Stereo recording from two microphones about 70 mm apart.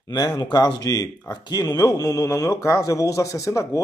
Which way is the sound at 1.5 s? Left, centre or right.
Left.